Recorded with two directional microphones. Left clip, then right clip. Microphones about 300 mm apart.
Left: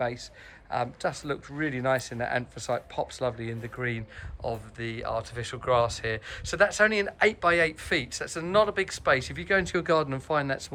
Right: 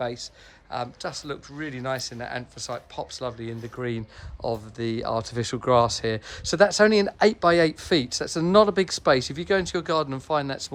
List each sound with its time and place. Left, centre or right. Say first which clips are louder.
0.0 s speech: right 1 dB; centre